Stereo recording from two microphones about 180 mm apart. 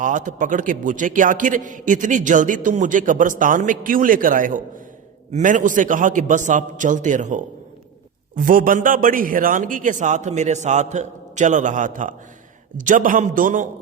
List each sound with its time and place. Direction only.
0.0 s a man's voice: 45° right (ahead or behind)